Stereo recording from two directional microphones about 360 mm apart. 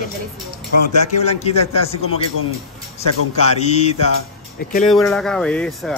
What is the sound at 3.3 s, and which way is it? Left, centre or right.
Speech, centre.